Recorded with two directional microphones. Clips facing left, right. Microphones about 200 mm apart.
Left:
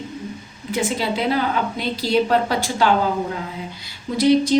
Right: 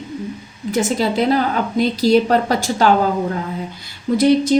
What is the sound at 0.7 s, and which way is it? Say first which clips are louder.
A woman's voice: right 4 dB; 45° right (ahead or behind).